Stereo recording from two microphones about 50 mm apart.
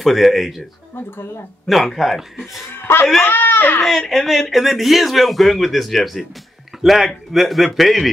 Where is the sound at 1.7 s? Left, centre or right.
Centre.